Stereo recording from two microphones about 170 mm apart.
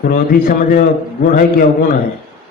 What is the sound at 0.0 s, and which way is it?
A man's voice, 55° left (ahead or behind).